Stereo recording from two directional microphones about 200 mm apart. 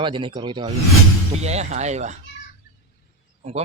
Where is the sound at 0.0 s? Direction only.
25° right (ahead or behind).